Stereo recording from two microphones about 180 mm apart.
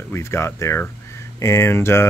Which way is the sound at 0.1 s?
15° left (ahead or behind).